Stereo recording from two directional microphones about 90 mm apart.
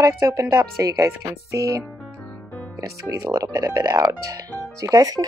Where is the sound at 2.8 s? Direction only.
40° right (ahead or behind).